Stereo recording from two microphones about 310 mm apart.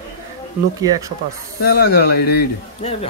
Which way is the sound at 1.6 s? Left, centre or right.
Left.